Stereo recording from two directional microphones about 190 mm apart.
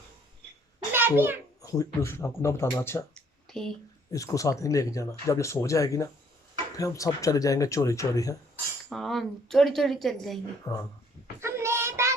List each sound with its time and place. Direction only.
0.9 s a child's voice: 10° right (ahead or behind)
1.6 s speech: 15° left (ahead or behind)
3.5 s a sound: 5° left (ahead or behind)
4.1 s speech: 15° left (ahead or behind)
8.9 s speech: centre (ahead or behind)
10.7 s speech: 20° left (ahead or behind)
11.3 s child singing: 15° right (ahead or behind)